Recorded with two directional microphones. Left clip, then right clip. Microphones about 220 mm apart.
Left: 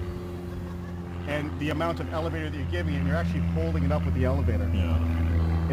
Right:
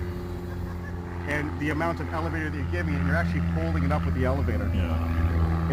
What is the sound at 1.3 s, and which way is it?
Speech, 50° left (ahead or behind).